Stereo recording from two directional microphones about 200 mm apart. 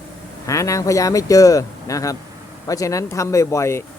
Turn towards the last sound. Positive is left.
turn(degrees=15)  # may be behind; listen again after turning